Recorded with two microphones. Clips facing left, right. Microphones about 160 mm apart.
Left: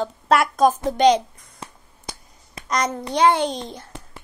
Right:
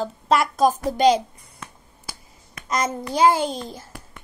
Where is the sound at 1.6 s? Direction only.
30° left (ahead or behind).